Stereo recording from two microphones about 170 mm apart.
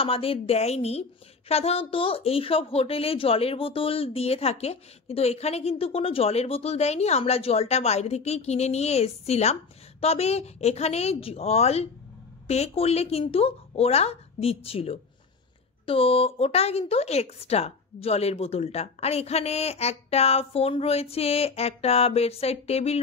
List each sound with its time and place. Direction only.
0.0 s a woman's voice: 35° left (ahead or behind)